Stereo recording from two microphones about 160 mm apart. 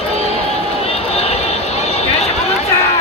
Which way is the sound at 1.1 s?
40° left (ahead or behind).